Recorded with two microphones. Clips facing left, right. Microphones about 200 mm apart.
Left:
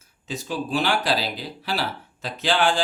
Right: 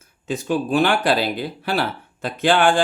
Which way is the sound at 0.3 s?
55° right (ahead or behind).